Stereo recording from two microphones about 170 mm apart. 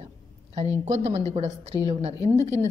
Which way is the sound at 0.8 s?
40° right (ahead or behind).